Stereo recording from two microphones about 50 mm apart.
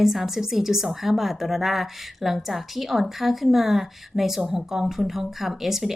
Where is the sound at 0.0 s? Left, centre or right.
Centre.